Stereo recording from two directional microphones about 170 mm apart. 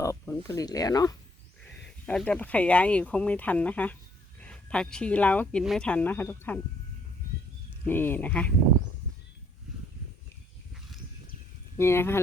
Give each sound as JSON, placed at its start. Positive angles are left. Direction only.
{"t": 0.0, "sound": "speech", "side_deg": 20}
{"t": 1.6, "sound": "speech", "side_deg": 5}
{"t": 7.9, "sound": "speech", "side_deg": 10}
{"t": 11.8, "sound": "speech", "side_deg": 15}